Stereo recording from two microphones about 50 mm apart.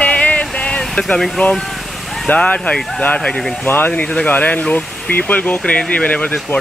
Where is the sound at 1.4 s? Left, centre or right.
Left.